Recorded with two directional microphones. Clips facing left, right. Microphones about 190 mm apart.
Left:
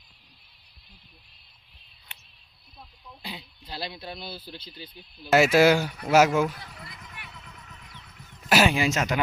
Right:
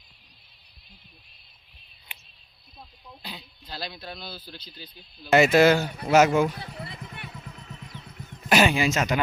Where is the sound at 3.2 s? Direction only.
25° left (ahead or behind).